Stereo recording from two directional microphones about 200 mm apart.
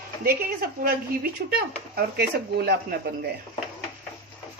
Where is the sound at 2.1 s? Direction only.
55° right (ahead or behind).